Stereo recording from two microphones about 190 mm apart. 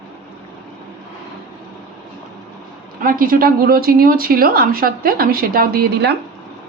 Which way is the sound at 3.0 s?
50° right (ahead or behind).